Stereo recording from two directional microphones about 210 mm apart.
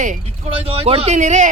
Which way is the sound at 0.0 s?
30° right (ahead or behind).